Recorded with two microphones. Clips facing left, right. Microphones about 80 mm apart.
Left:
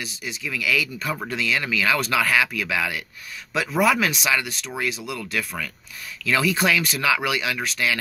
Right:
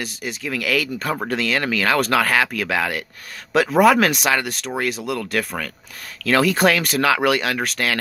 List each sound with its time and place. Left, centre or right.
0.0 s speech: right